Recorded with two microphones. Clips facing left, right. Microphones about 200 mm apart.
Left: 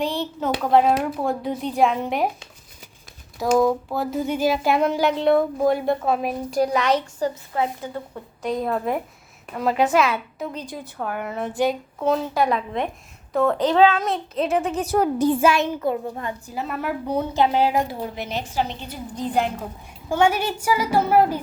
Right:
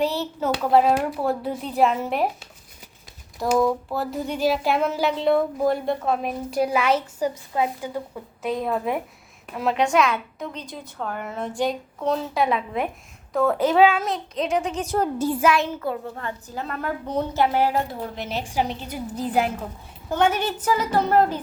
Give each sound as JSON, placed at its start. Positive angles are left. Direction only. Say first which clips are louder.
{"t": 0.0, "sound": "a child's voice", "louder": "right 1 dB", "side_deg": -5}
{"t": 3.3, "sound": "speech", "louder": "left 2 dB", "side_deg": 0}
{"t": 15.3, "sound": "a child's voice", "louder": "left 2 dB", "side_deg": 25}
{"t": 18.0, "sound": "speech", "louder": "left 1 dB", "side_deg": 5}
{"t": 20.1, "sound": "a child's voice", "louder": "left 2 dB", "side_deg": 10}